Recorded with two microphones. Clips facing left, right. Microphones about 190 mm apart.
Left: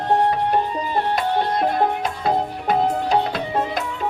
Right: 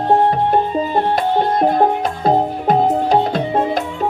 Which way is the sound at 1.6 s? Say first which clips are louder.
Right 5 dB; 40° right (ahead or behind).